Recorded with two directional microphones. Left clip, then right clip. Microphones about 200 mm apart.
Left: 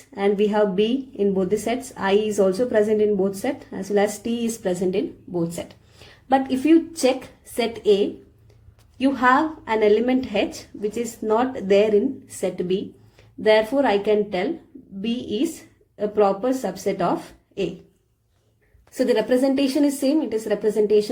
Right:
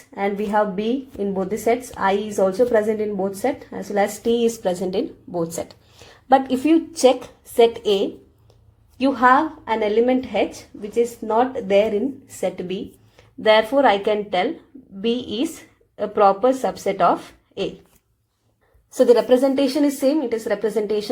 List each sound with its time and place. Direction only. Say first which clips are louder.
0.1 s a woman's voice: left 1 dB; 15° right (ahead or behind)
19.0 s speech: right 4 dB; 25° right (ahead or behind)